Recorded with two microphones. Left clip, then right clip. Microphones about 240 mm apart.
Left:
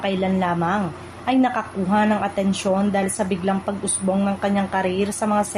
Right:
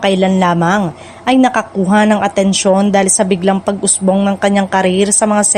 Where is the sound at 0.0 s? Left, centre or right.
Right.